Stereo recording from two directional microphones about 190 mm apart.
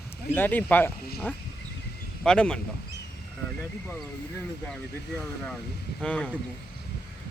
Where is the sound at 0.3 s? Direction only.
10° left (ahead or behind).